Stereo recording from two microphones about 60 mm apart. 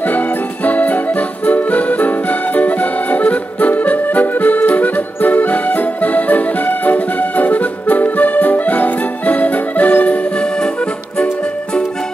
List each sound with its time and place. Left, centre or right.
0.7 s music: left